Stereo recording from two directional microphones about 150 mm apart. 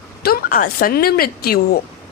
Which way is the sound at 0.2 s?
80° left.